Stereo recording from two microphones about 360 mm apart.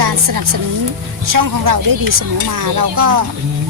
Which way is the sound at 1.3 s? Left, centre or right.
Right.